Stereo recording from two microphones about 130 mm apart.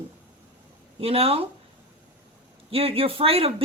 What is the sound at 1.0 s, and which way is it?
Speech, 50° right (ahead or behind).